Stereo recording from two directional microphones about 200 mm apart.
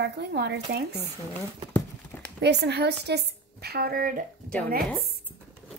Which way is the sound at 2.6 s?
55° right (ahead or behind).